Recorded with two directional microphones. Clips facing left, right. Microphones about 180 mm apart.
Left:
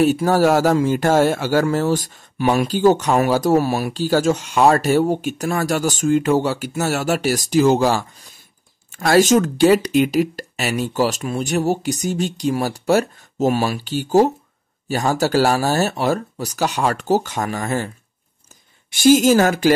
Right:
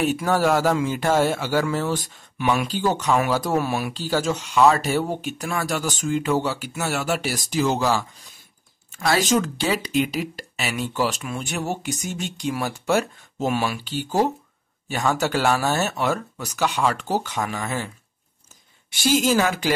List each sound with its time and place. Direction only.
0.0 s speech: 35° left (ahead or behind)
9.0 s speech: 50° left (ahead or behind)
19.0 s speech: 45° left (ahead or behind)